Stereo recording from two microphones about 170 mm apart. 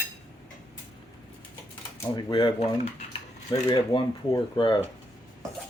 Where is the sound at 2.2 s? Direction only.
25° left (ahead or behind).